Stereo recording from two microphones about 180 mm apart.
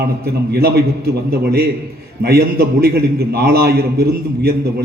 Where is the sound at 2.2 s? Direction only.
60° right (ahead or behind).